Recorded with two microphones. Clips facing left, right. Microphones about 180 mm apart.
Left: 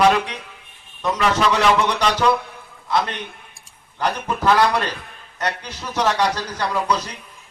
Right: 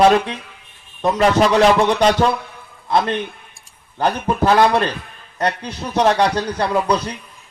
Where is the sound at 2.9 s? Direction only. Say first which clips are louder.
Right 4 dB; 30° right (ahead or behind).